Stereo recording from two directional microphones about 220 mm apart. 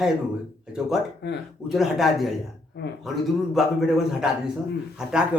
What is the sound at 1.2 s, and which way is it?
Speech, 50° left (ahead or behind).